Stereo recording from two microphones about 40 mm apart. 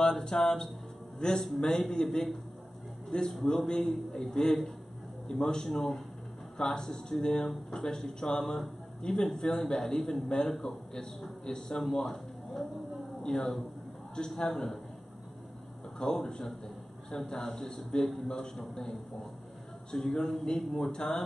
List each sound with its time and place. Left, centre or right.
0.0 s music: centre
0.4 s a man's voice: centre
16.0 s a man's voice: centre
20.9 s speech: centre